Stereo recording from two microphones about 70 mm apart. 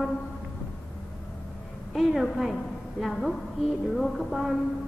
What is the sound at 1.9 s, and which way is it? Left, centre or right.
A woman's voice, centre.